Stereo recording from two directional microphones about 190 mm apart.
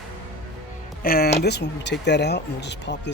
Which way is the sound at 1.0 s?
50° left (ahead or behind).